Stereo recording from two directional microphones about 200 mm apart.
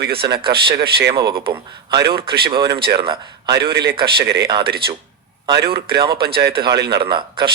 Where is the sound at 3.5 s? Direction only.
55° right (ahead or behind).